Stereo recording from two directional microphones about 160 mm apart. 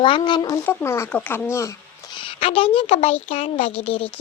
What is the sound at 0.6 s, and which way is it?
Speech, 15° left (ahead or behind).